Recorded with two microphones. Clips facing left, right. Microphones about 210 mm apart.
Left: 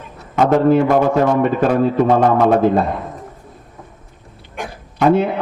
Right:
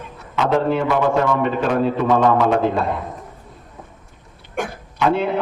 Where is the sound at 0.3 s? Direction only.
45° left (ahead or behind).